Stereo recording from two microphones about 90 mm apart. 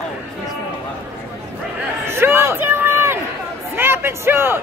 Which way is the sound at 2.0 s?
25° right (ahead or behind).